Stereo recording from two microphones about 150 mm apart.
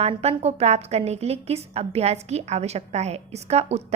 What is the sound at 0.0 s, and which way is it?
A woman's voice, 45° right (ahead or behind).